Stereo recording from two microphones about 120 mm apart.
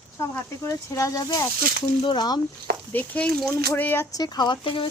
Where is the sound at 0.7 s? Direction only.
25° left (ahead or behind).